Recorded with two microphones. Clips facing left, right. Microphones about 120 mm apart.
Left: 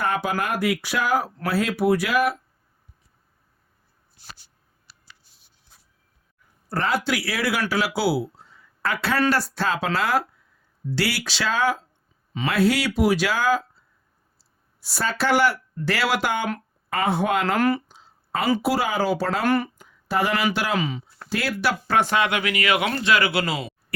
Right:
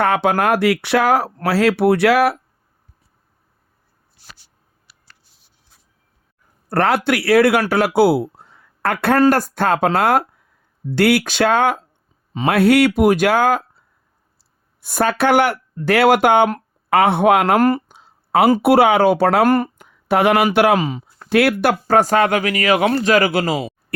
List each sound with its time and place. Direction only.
0.0 s speech: 75° right (ahead or behind)
6.7 s speech: 65° right (ahead or behind)
17.6 s speech: 45° right (ahead or behind)
17.9 s a sound: 70° right (ahead or behind)
18.6 s speech: 65° right (ahead or behind)
19.5 s speech: 45° right (ahead or behind)
19.8 s speech: 65° right (ahead or behind)
20.7 s speech: 45° right (ahead or behind)
21.2 s speech: 65° right (ahead or behind); by 23.7 s 40° right (ahead or behind)